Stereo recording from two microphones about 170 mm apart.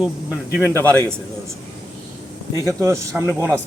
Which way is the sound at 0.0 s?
10° right (ahead or behind).